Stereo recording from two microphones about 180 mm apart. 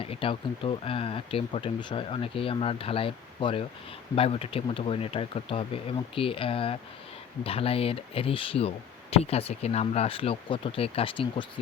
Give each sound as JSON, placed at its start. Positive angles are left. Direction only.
{"t": 0.0, "sound": "speech", "side_deg": 30}